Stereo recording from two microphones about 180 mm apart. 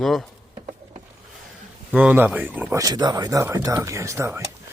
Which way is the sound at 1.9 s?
10° right (ahead or behind).